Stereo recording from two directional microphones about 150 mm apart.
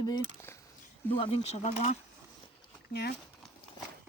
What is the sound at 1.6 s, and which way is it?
Speech, 50° left (ahead or behind).